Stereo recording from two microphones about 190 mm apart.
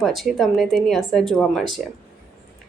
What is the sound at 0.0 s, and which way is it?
Speech, centre (ahead or behind).